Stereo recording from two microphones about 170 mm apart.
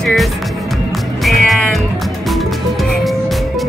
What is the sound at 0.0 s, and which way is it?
Speech, centre (ahead or behind).